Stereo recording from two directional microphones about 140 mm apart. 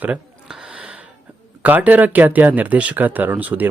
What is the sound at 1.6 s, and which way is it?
Speech, 15° right (ahead or behind).